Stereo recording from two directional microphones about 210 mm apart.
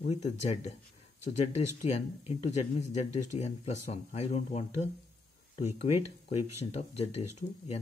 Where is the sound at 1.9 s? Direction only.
30° left (ahead or behind).